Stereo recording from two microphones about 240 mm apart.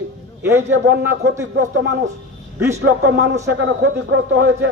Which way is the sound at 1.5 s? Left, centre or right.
Right.